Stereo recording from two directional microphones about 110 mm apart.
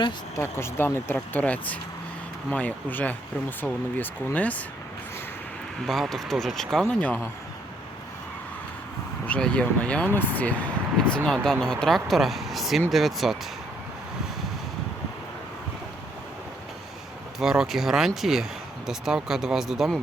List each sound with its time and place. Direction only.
0.3 s speech: 20° left (ahead or behind)
5.8 s speech: centre (ahead or behind)
9.2 s speech: 10° left (ahead or behind)
17.4 s speech: 5° right (ahead or behind)